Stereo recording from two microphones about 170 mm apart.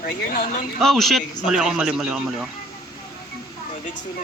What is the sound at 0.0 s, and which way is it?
Speech, 55° left (ahead or behind).